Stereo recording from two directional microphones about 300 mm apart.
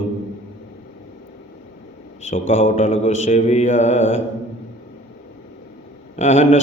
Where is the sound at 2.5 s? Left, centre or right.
Left.